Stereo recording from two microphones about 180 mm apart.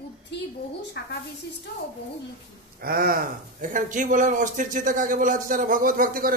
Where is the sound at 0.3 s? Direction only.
70° left (ahead or behind).